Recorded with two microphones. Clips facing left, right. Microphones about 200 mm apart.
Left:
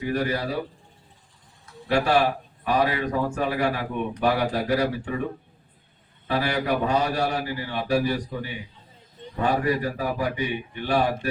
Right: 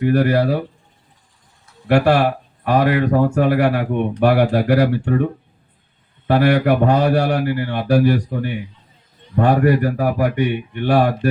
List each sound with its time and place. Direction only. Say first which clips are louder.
0.0 s speech: right 10 dB; 65° right (ahead or behind)
1.9 s speech: right 6 dB; 65° right (ahead or behind)
6.2 s speech: right 10 dB; 65° right (ahead or behind)